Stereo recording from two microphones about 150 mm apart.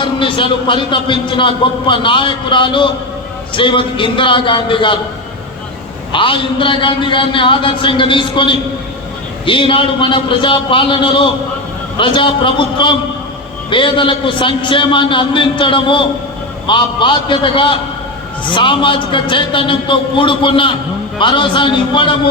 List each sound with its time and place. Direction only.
0.0 s a man's voice: 35° left (ahead or behind)
6.1 s a man's voice: 35° left (ahead or behind)